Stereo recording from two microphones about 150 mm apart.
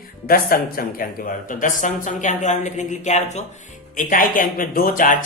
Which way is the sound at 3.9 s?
65° left (ahead or behind).